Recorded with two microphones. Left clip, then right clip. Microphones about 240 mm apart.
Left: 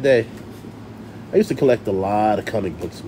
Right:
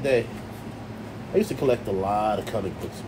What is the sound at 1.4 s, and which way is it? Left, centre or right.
Speech, left.